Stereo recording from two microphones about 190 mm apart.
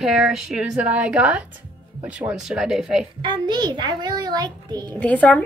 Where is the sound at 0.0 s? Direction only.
5° right (ahead or behind).